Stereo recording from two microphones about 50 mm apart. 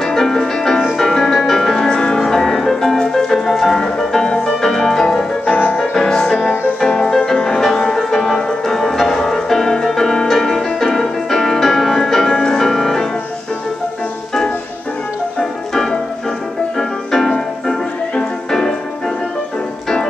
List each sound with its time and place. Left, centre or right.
0.0 s music: centre
5.4 s music: left
5.8 s music: centre
15.7 s music: centre